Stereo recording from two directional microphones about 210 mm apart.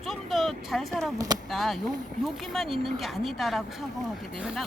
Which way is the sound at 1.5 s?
Centre (ahead or behind).